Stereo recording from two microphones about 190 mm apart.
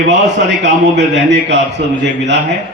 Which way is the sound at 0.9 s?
70° right (ahead or behind).